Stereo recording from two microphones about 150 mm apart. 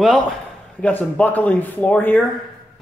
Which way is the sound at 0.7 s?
10° left (ahead or behind).